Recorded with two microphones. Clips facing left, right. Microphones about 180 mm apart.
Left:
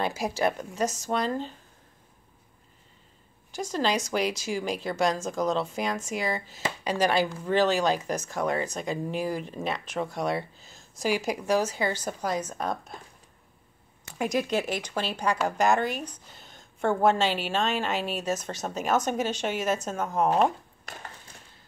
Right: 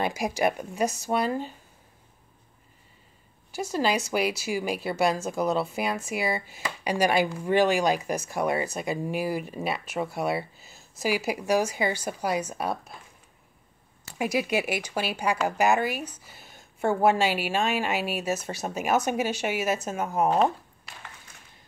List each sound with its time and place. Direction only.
0.0 s speech: 15° right (ahead or behind)
3.5 s speech: 10° right (ahead or behind)
14.1 s speech: 10° right (ahead or behind)
20.8 s a sound: 45° left (ahead or behind)